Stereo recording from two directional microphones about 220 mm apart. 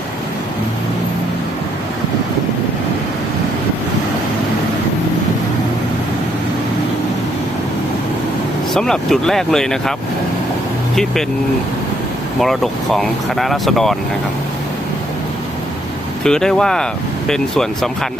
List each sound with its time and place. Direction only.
8.7 s speech: centre (ahead or behind)
10.9 s speech: centre (ahead or behind)
12.4 s speech: centre (ahead or behind)
16.2 s speech: 5° left (ahead or behind)